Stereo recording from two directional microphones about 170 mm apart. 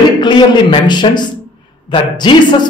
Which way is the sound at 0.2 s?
25° left (ahead or behind).